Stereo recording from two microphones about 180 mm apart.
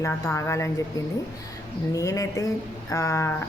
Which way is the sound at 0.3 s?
15° left (ahead or behind).